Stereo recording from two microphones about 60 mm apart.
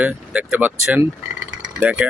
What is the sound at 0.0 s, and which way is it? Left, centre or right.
Speech, right.